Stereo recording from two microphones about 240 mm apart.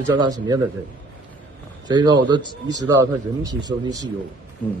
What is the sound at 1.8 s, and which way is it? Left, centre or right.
A man's voice, centre.